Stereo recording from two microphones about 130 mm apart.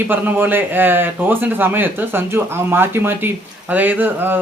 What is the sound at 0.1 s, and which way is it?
Speech, 15° right (ahead or behind).